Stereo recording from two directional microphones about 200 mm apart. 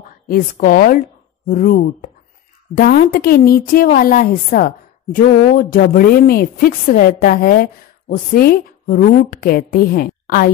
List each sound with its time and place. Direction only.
0.3 s a woman's voice: 45° left (ahead or behind)